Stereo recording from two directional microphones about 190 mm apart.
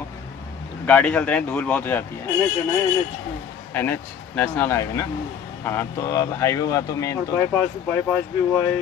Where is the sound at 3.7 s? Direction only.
10° left (ahead or behind).